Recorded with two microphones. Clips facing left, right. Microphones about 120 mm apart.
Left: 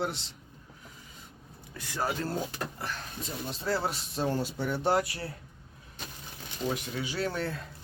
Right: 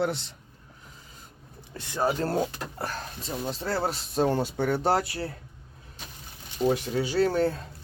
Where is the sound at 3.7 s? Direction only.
30° right (ahead or behind).